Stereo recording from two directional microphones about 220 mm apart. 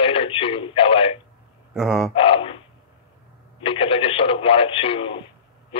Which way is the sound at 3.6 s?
25° left (ahead or behind).